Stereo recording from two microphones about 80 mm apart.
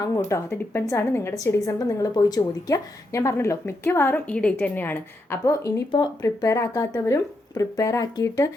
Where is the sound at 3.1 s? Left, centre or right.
Left.